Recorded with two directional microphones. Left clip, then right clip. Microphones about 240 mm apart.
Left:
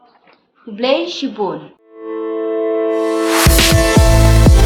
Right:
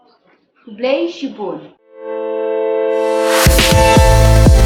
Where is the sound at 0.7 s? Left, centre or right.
Left.